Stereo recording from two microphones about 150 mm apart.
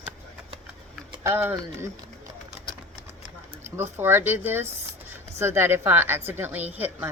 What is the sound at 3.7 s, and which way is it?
A woman's voice, 15° right (ahead or behind).